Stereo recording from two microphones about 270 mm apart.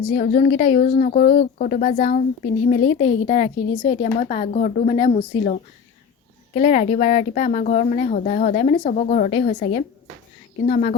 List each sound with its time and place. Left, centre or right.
0.2 s a woman's voice: left